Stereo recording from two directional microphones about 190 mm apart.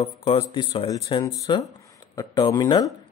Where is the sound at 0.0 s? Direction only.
25° left (ahead or behind).